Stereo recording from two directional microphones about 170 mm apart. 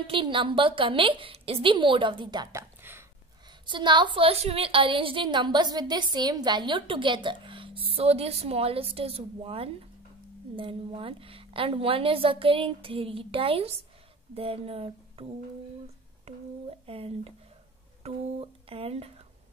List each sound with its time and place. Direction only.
0.0 s a woman's voice: 30° right (ahead or behind)
2.8 s a sound: 15° right (ahead or behind)
3.6 s a woman's voice: 25° right (ahead or behind)
16.3 s a woman's voice: 40° right (ahead or behind)